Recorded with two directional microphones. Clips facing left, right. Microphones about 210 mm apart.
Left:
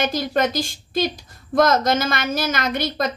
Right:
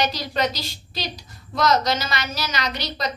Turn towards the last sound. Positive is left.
turn(degrees=50)  # may be behind; listen again after turning